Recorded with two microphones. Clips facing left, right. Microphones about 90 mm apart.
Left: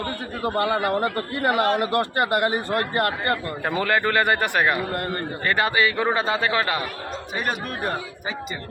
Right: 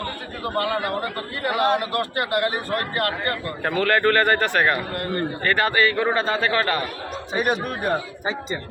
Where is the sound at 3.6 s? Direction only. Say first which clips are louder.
Right 4 dB; 15° left (ahead or behind).